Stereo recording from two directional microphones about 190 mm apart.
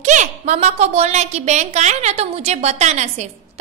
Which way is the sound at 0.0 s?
40° right (ahead or behind).